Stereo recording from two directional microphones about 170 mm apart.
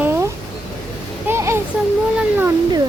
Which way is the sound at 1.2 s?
15° right (ahead or behind).